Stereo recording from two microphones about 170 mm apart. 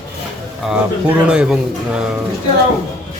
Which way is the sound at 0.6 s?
5° right (ahead or behind).